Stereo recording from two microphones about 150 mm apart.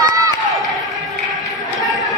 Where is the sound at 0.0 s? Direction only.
25° right (ahead or behind).